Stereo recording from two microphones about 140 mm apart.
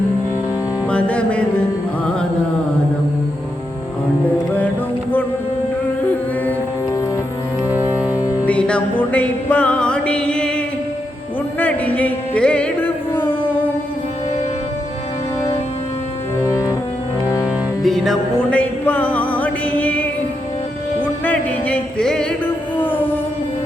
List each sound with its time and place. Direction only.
0.9 s music: 10° left (ahead or behind)
7.7 s music: 15° right (ahead or behind)
8.4 s music: 10° left (ahead or behind)
11.6 s music: 10° left (ahead or behind)
16.5 s cello: 20° left (ahead or behind)
17.4 s music: centre (ahead or behind)